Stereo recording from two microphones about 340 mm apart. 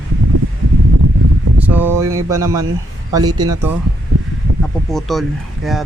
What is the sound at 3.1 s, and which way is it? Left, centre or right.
Speech, centre.